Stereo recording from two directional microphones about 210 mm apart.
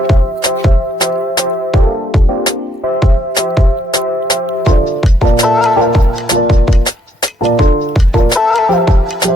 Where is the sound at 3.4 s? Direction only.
20° left (ahead or behind).